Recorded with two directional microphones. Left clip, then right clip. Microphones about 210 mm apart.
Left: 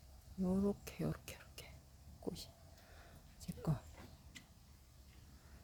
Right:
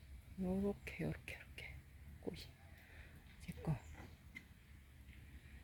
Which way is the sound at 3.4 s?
25° left (ahead or behind).